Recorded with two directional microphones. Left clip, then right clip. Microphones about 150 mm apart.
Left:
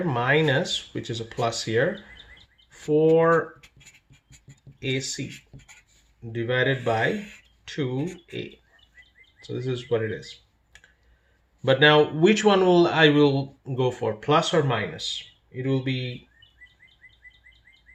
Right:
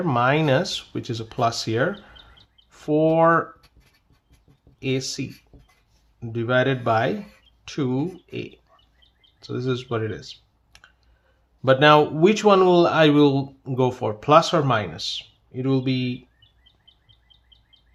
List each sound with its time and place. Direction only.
0.0 s speech: 45° right (ahead or behind)
4.8 s speech: 45° right (ahead or behind)
6.3 s speech: 50° right (ahead or behind)
11.6 s speech: 40° right (ahead or behind); by 16.0 s 60° right (ahead or behind)